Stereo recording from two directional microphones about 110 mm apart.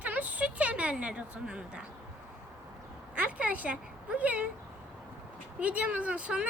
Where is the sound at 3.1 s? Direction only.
10° right (ahead or behind).